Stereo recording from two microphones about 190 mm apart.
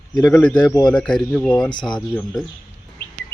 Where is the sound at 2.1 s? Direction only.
Centre (ahead or behind).